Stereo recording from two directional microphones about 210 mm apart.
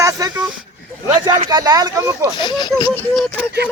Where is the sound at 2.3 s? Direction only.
20° left (ahead or behind).